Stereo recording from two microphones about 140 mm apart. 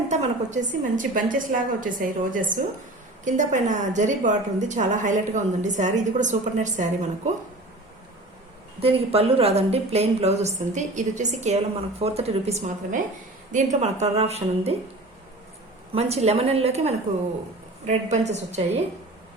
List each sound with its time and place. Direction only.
0.1 s a woman's voice: 60° right (ahead or behind)
8.8 s a woman's voice: 45° right (ahead or behind)
15.9 s a woman's voice: 50° right (ahead or behind)